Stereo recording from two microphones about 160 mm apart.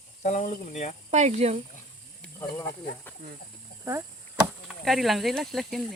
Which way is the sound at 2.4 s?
20° left (ahead or behind).